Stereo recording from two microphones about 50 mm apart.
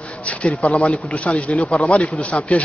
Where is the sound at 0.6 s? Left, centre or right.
Left.